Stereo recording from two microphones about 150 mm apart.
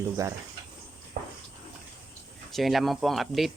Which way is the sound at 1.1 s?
90° right.